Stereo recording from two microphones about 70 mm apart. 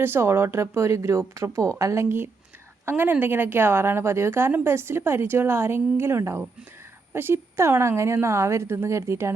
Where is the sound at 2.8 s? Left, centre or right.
Right.